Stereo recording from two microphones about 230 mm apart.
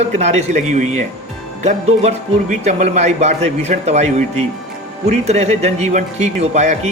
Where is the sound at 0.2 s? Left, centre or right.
Right.